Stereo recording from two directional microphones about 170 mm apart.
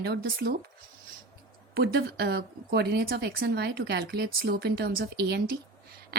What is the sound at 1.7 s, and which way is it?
Speech, 70° right (ahead or behind).